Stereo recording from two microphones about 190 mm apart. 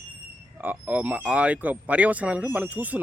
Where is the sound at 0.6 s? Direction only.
10° right (ahead or behind).